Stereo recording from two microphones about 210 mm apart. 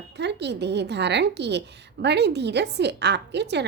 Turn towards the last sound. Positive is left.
turn(degrees=-55)  # may be behind; listen again after turning